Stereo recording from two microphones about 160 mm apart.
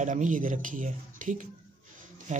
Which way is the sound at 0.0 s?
50° right (ahead or behind).